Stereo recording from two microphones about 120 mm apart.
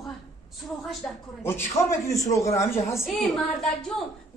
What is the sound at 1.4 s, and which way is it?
A man's voice, 20° left (ahead or behind).